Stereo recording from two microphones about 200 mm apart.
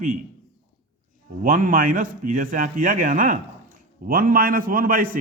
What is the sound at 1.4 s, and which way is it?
A man's voice, 40° right (ahead or behind).